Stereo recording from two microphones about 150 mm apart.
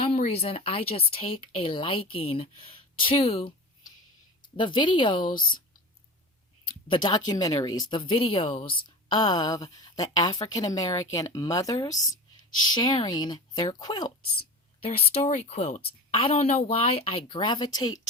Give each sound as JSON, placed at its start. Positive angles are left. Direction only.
{"t": 0.0, "sound": "speech", "side_deg": 40}
{"t": 4.5, "sound": "speech", "side_deg": 30}
{"t": 5.2, "sound": "speech", "side_deg": 70}
{"t": 6.8, "sound": "speech", "side_deg": 30}
{"t": 14.8, "sound": "a woman's voice", "side_deg": 40}